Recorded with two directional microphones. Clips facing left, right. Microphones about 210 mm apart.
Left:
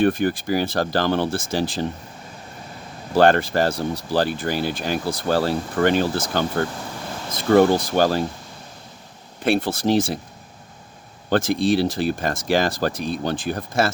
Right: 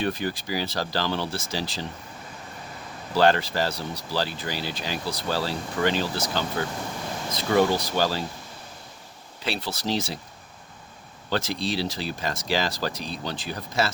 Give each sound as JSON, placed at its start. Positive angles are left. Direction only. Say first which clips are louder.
{"t": 0.0, "sound": "speech", "louder": "left 8 dB", "side_deg": 55}
{"t": 3.2, "sound": "speech", "louder": "left 5 dB", "side_deg": 50}
{"t": 9.4, "sound": "speech", "louder": "left 10 dB", "side_deg": 50}
{"t": 11.3, "sound": "speech", "louder": "left 9 dB", "side_deg": 50}